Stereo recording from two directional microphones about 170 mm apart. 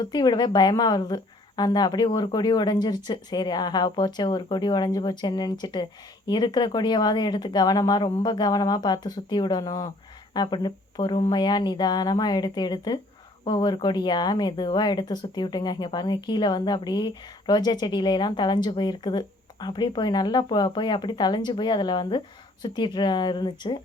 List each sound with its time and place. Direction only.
0.1 s a woman's voice: 25° left (ahead or behind)